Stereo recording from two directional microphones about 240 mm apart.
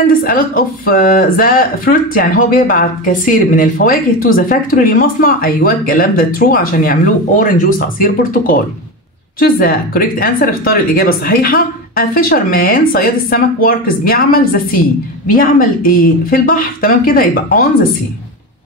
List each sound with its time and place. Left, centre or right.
0.1 s speech: left